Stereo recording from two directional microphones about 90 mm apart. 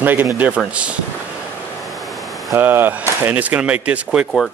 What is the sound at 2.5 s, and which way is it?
Speech, 25° right (ahead or behind).